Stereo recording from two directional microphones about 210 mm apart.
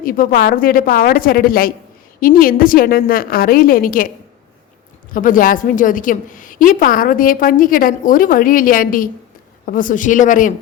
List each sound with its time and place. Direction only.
0.0 s a woman's voice: 40° left (ahead or behind)
5.1 s a woman's voice: 40° left (ahead or behind)